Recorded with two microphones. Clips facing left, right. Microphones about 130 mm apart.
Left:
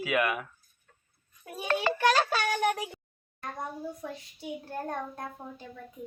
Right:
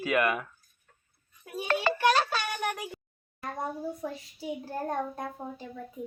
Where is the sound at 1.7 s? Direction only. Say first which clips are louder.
Even; 90° right.